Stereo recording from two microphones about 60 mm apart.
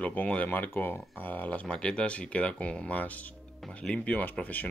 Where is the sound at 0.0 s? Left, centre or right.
Left.